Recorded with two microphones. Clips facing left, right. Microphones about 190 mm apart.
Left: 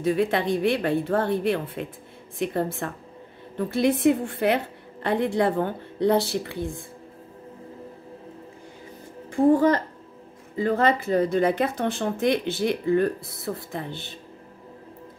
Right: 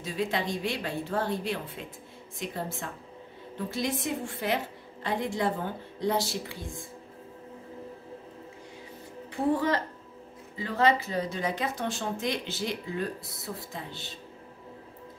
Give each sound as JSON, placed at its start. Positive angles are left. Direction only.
{"t": 0.0, "sound": "speech", "side_deg": 60}
{"t": 9.3, "sound": "speech", "side_deg": 50}